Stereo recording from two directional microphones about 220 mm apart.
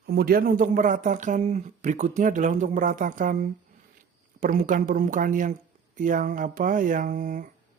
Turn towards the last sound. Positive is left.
turn(degrees=-35)  # may be behind; listen again after turning